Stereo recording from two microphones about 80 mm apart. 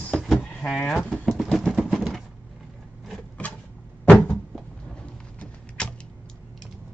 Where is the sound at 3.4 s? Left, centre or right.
Centre.